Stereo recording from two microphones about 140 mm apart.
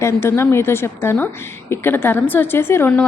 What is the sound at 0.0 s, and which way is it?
A woman's voice, 20° left (ahead or behind).